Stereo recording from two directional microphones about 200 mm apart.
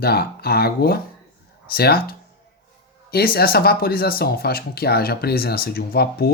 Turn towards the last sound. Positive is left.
turn(degrees=50)  # may be behind; listen again after turning